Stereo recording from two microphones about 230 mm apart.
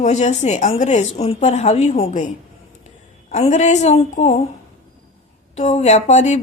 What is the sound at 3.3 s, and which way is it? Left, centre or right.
A woman's voice, left.